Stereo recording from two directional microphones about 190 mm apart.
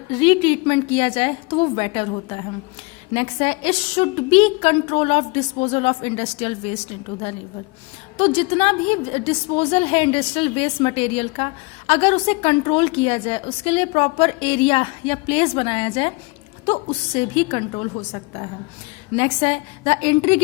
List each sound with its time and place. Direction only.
0.1 s a woman's voice: 25° left (ahead or behind)
8.2 s a woman's voice: 30° left (ahead or behind)